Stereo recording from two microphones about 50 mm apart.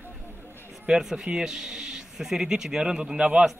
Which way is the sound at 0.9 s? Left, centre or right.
Centre.